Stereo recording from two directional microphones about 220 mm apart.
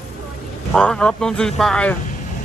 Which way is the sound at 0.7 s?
5° left (ahead or behind).